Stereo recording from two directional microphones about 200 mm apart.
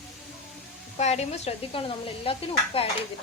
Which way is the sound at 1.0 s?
35° left (ahead or behind).